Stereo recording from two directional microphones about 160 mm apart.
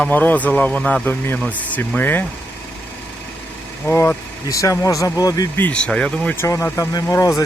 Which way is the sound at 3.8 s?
15° left (ahead or behind).